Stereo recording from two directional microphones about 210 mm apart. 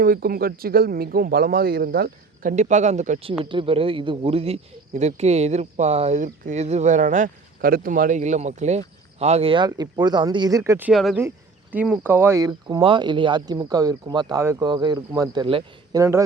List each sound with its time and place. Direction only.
0.0 s speech: 45° right (ahead or behind); by 16.2 s 15° right (ahead or behind)